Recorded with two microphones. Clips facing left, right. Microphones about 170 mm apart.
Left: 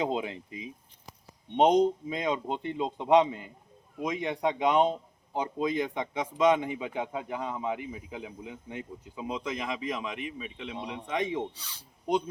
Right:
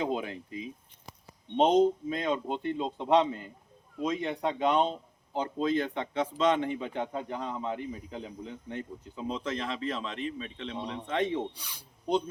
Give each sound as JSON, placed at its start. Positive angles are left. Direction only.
{"t": 0.0, "sound": "speech", "side_deg": 20}
{"t": 11.5, "sound": "speech", "side_deg": -10}